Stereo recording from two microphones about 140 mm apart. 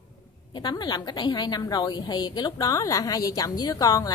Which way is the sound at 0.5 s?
30° left (ahead or behind).